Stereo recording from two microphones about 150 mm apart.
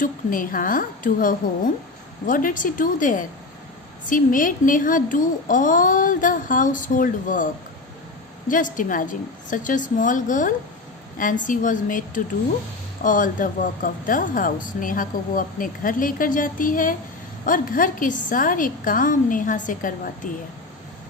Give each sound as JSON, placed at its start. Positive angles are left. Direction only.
{"t": 0.0, "sound": "speech", "side_deg": 65}
{"t": 8.4, "sound": "speech", "side_deg": 60}